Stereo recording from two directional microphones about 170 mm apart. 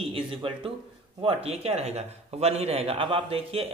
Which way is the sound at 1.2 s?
35° right (ahead or behind).